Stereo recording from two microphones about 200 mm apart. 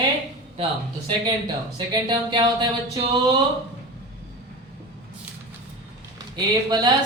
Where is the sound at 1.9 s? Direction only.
20° right (ahead or behind).